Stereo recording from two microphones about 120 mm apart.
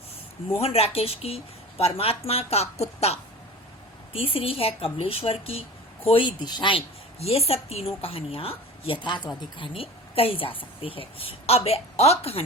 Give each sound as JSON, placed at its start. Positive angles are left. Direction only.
{"t": 0.5, "sound": "a woman's voice", "side_deg": 55}
{"t": 7.2, "sound": "a woman's voice", "side_deg": 55}
{"t": 9.6, "sound": "a woman's voice", "side_deg": 50}